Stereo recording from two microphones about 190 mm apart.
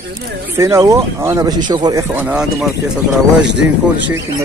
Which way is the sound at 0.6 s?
15° right (ahead or behind).